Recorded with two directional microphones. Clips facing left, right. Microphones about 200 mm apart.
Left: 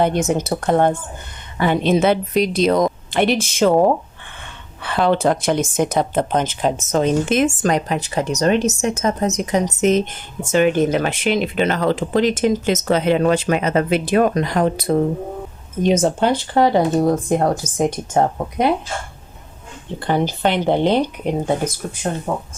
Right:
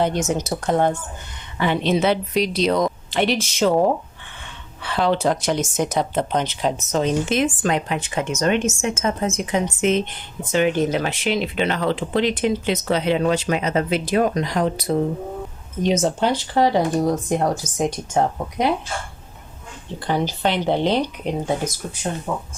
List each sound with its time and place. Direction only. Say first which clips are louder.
0.0 s speech: left 3 dB; 55° left (ahead or behind)
20.0 s speech: left 3 dB; 55° left (ahead or behind)
22.3 s speech: left 3 dB; 50° left (ahead or behind)